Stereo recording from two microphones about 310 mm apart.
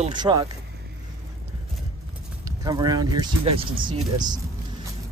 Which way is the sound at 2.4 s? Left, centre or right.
Centre.